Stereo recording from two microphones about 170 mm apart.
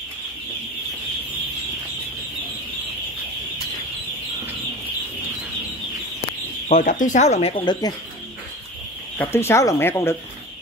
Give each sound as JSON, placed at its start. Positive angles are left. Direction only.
{"t": 6.7, "sound": "speech", "side_deg": 50}
{"t": 9.2, "sound": "speech", "side_deg": 15}